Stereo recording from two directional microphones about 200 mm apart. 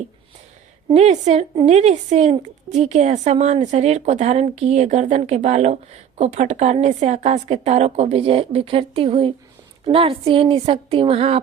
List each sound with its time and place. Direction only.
0.9 s a woman's voice: 35° right (ahead or behind)